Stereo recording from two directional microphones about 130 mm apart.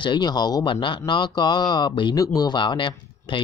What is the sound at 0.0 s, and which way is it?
Speech, 35° left (ahead or behind).